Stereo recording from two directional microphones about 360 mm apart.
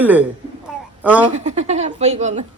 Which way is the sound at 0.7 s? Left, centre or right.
Centre.